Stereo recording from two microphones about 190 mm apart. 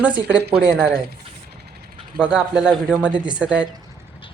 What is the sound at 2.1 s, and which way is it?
Speech, 5° right (ahead or behind).